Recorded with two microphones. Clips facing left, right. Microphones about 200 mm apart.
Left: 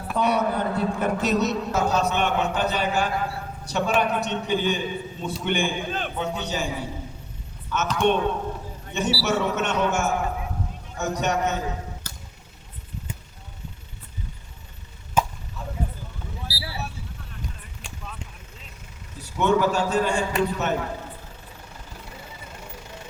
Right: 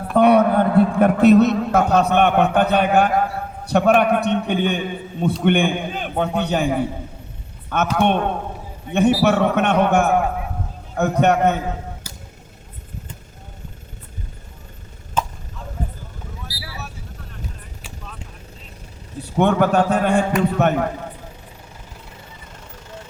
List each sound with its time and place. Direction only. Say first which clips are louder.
0.1 s a man's voice: right 9 dB; 55° right (ahead or behind)
7.9 s a man's voice: right 1 dB; 60° right (ahead or behind)
12.1 s a sound: right 3 dB; 10° right (ahead or behind)
15.2 s chop: even; 10° left (ahead or behind)
19.2 s a man's voice: right 4 dB; 60° right (ahead or behind)